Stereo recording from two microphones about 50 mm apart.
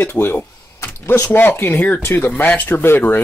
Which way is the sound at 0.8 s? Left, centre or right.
Left.